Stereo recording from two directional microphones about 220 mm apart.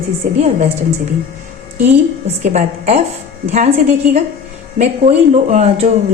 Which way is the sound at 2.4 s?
30° right (ahead or behind).